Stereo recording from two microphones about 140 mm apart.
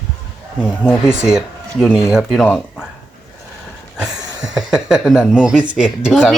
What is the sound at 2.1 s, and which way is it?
Speech, centre (ahead or behind).